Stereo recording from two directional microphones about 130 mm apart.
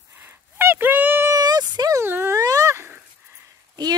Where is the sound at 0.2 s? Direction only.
15° right (ahead or behind).